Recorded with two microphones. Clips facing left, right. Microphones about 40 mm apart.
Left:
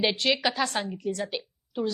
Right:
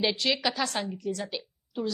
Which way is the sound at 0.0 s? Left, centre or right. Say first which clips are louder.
Left 2 dB; left.